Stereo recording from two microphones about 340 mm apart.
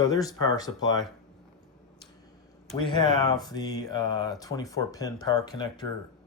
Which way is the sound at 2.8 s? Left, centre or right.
Centre.